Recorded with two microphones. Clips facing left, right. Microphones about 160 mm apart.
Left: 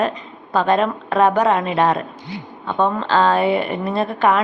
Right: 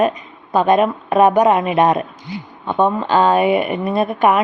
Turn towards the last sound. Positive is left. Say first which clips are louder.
# right 2 dB
turn(degrees=-15)  # may be behind; listen again after turning